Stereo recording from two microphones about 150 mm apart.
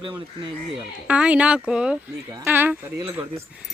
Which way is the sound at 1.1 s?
10° right (ahead or behind).